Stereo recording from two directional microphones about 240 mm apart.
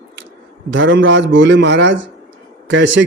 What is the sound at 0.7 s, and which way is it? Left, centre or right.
Speech, right.